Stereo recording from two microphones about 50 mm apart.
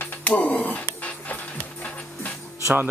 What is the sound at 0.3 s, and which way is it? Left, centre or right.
Speech, left.